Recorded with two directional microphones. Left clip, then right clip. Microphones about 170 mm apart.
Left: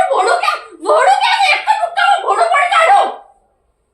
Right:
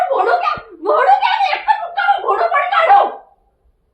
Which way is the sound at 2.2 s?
25° left (ahead or behind).